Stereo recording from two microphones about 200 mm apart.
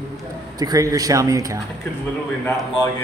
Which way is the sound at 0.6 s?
20° right (ahead or behind).